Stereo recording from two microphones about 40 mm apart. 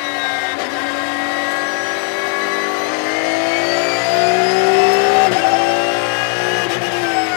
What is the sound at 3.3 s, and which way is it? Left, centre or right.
Vehicle, centre.